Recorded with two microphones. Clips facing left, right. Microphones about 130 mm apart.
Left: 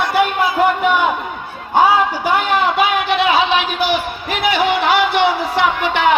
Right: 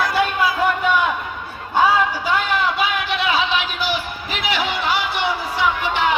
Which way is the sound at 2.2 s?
60° left (ahead or behind).